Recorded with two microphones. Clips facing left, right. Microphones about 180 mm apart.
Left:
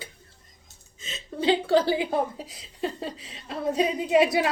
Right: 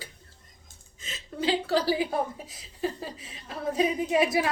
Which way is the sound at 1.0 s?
25° left (ahead or behind).